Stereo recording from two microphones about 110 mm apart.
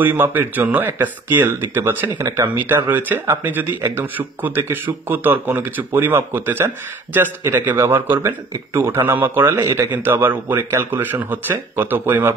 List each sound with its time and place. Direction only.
0.0 s speech: 20° right (ahead or behind)